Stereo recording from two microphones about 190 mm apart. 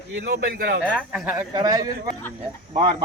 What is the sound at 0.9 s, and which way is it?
Speech, 5° right (ahead or behind).